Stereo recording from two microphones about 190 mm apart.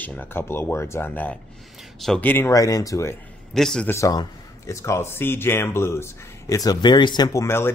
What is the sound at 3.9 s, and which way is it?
Speech, 20° left (ahead or behind).